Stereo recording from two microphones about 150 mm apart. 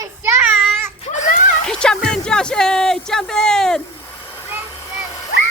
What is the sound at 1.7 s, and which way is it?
Music, 5° left (ahead or behind).